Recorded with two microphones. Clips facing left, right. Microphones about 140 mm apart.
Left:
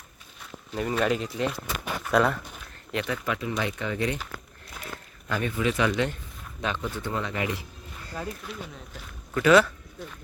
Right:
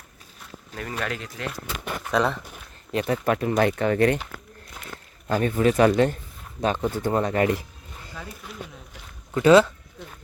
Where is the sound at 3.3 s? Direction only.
50° right (ahead or behind).